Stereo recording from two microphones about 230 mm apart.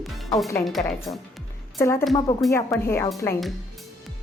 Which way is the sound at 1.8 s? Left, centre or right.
Centre.